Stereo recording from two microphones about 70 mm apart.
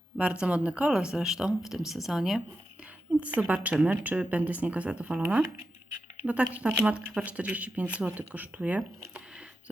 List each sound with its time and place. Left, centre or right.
0.2 s speech: centre
3.2 s speech: right
6.2 s speech: centre